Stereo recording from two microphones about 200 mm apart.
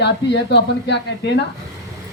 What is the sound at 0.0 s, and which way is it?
Speech, 60° left (ahead or behind).